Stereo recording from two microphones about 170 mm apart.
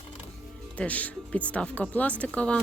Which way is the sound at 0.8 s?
5° left (ahead or behind).